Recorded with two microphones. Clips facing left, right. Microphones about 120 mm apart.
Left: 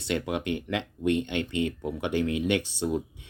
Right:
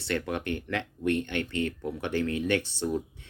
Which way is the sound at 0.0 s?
15° left (ahead or behind).